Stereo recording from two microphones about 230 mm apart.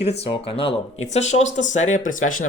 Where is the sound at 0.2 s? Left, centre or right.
Left.